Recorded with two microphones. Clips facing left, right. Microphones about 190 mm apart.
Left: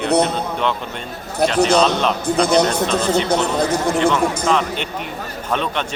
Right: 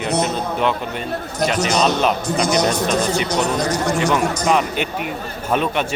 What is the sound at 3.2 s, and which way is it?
Speech, 55° left (ahead or behind).